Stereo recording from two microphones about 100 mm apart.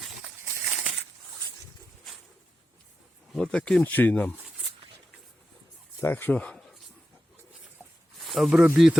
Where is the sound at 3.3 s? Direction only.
10° left (ahead or behind).